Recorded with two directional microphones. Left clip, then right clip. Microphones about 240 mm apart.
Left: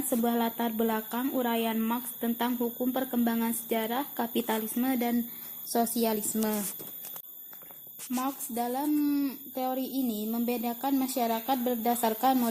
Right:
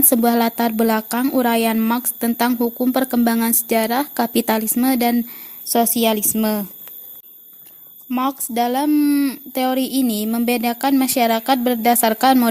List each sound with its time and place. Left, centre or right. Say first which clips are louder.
0.1 s a woman's voice: right 11 dB; right
8.1 s speech: right 12 dB; right